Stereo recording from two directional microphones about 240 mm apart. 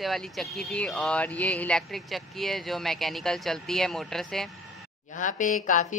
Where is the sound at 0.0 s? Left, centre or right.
Centre.